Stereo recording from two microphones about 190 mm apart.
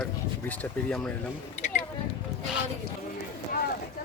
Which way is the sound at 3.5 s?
50° left (ahead or behind).